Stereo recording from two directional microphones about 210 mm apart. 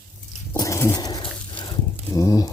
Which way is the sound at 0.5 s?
15° left (ahead or behind).